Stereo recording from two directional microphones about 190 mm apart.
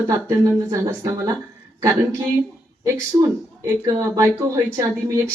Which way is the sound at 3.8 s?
20° right (ahead or behind).